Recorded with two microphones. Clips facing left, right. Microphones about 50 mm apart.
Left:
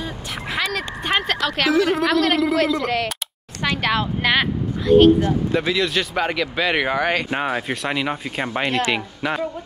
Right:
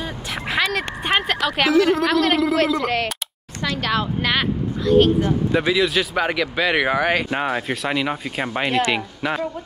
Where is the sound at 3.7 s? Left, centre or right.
Centre.